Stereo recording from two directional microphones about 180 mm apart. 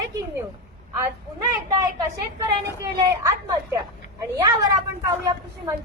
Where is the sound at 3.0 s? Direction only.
20° right (ahead or behind).